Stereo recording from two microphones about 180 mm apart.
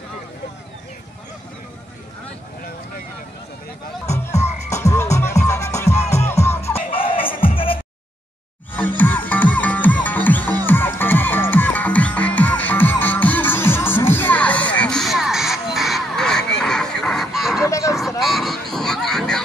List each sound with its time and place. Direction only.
4.3 s music: 40° left (ahead or behind)
4.6 s music: 15° left (ahead or behind)
6.7 s music: 30° left (ahead or behind)
8.7 s music: 10° left (ahead or behind)
17.6 s a sound: 15° left (ahead or behind)
18.2 s a sound: centre (ahead or behind)
18.7 s honk: 5° left (ahead or behind)